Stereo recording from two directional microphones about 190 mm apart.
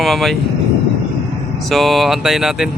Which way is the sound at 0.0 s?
Centre (ahead or behind).